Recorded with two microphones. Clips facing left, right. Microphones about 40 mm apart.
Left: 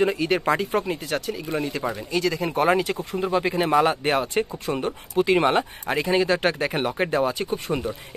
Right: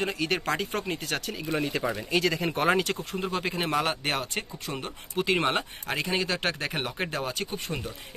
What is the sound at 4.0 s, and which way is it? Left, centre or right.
Speech, centre.